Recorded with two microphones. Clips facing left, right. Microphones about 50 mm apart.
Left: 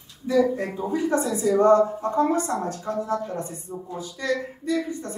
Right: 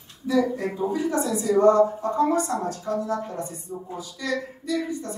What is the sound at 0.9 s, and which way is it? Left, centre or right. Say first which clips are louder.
A woman's voice: left 4 dB; left.